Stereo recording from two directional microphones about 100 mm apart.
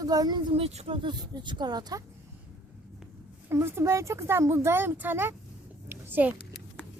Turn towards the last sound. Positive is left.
turn(degrees=-20)  # may be behind; listen again after turning